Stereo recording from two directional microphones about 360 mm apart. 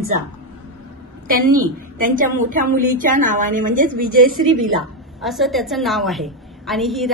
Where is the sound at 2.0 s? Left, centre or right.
Right.